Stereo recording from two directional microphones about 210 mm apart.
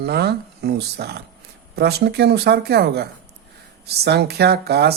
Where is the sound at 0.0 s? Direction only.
50° right (ahead or behind).